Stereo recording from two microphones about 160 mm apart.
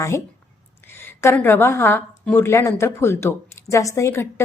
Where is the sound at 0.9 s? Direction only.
15° left (ahead or behind).